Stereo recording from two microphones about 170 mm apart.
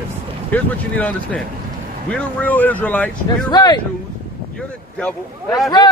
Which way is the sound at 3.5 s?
25° left (ahead or behind).